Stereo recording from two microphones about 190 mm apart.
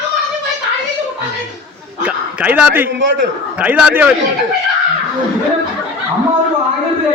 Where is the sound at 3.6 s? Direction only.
10° right (ahead or behind).